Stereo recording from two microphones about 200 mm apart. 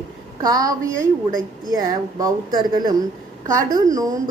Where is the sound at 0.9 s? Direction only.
40° right (ahead or behind).